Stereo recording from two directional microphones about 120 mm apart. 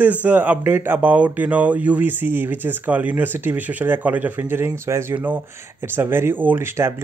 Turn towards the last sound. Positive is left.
turn(degrees=-20)  # may be behind; listen again after turning